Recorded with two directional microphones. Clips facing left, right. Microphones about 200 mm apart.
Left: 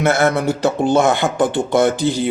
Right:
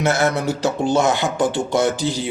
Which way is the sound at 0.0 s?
55° left (ahead or behind).